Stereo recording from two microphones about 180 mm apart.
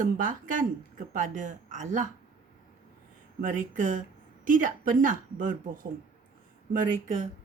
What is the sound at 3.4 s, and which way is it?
Speech, 45° right (ahead or behind).